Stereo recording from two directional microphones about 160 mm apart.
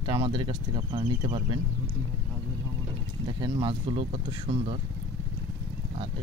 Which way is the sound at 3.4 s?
30° right (ahead or behind).